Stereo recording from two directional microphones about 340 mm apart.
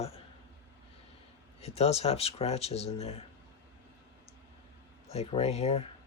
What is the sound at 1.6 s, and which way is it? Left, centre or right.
Speech, centre.